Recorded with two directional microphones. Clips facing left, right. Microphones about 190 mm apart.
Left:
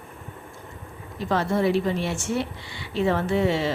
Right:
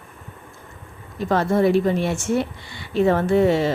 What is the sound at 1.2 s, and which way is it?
A woman's voice, 50° right (ahead or behind).